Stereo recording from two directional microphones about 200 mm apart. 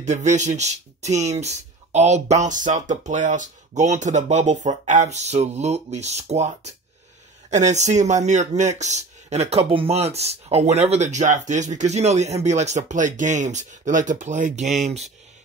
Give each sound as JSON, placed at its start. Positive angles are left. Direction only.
{"t": 0.0, "sound": "speech", "side_deg": -35}